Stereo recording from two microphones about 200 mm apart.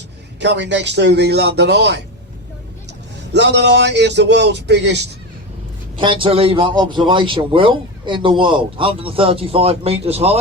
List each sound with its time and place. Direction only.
0.3 s a man's voice: 60° right (ahead or behind)
3.3 s a man's voice: 60° right (ahead or behind)
6.0 s a man's voice: 25° right (ahead or behind)